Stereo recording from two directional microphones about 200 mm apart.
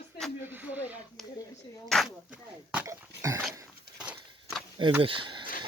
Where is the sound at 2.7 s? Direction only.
10° right (ahead or behind).